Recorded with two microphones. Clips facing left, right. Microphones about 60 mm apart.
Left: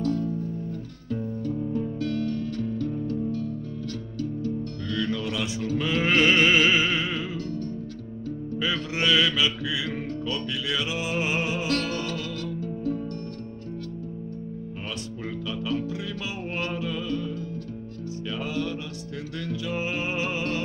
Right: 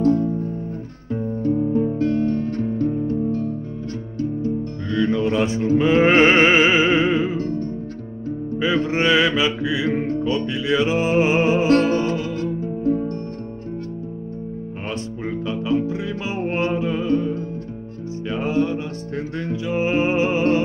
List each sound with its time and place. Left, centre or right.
0.0 s music: right
15.2 s music: right